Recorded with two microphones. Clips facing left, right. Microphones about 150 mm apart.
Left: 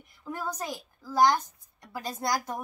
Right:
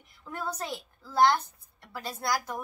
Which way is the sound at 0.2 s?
10° left (ahead or behind).